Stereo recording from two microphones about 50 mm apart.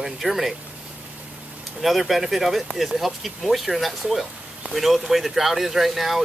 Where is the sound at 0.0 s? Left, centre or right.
Centre.